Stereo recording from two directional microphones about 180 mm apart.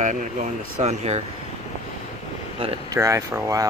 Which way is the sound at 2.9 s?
15° right (ahead or behind).